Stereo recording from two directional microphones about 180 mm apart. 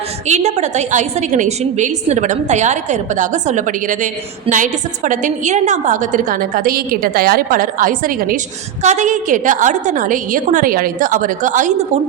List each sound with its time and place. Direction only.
0.3 s a woman's voice: 40° right (ahead or behind)
8.8 s a woman's voice: 40° right (ahead or behind)